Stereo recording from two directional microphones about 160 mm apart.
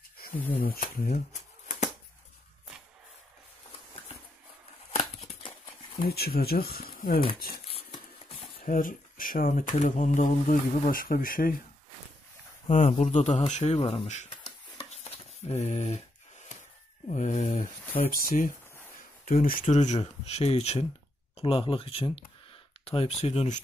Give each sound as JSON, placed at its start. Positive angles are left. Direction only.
{"t": 0.6, "sound": "speech", "side_deg": 65}
{"t": 1.3, "sound": "shuffling cards", "side_deg": 45}
{"t": 4.9, "sound": "a sound", "side_deg": 40}
{"t": 5.9, "sound": "speech", "side_deg": 75}
{"t": 7.6, "sound": "a sound", "side_deg": 40}
{"t": 8.5, "sound": "speech", "side_deg": 60}
{"t": 12.6, "sound": "speech", "side_deg": 45}
{"t": 14.8, "sound": "a sound", "side_deg": 40}
{"t": 17.1, "sound": "speech", "side_deg": 50}
{"t": 19.6, "sound": "speech", "side_deg": 45}